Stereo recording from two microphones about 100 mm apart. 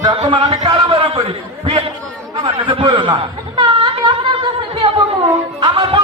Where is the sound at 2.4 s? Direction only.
50° right (ahead or behind).